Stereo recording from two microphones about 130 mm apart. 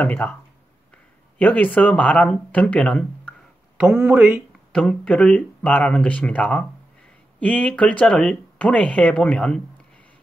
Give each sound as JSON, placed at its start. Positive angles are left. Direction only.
{"t": 0.0, "sound": "speech", "side_deg": 10}
{"t": 1.4, "sound": "speech", "side_deg": 10}
{"t": 3.7, "sound": "speech", "side_deg": -10}
{"t": 4.7, "sound": "speech", "side_deg": 5}